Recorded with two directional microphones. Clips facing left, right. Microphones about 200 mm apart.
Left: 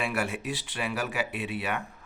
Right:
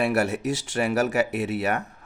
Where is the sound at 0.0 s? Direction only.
40° right (ahead or behind).